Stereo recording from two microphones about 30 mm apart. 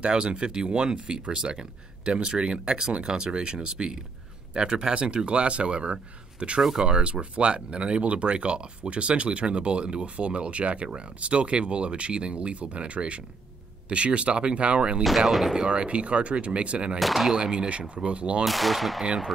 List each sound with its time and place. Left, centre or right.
0.0 s speech: right
15.0 s speech: centre
15.5 s speech: right
17.0 s speech: centre
17.4 s speech: right
17.6 s speech: right
18.4 s speech: centre